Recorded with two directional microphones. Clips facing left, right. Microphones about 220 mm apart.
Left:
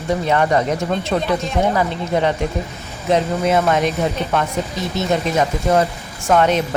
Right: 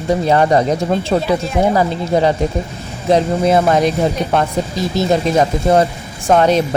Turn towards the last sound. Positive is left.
turn(degrees=-35)  # may be behind; listen again after turning